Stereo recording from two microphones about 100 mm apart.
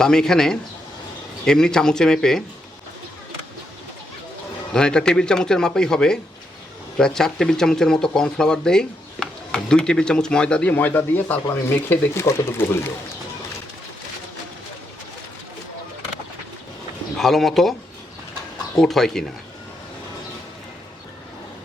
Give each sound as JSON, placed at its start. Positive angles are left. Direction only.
{"t": 0.0, "sound": "speech", "side_deg": 5}
{"t": 4.7, "sound": "speech", "side_deg": 10}
{"t": 17.2, "sound": "speech", "side_deg": 0}
{"t": 18.8, "sound": "speech", "side_deg": 5}